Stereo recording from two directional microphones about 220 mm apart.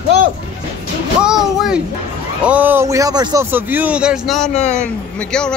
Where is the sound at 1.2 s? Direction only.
Centre (ahead or behind).